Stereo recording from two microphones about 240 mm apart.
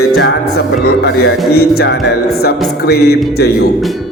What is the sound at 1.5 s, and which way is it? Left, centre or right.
A man's voice, left.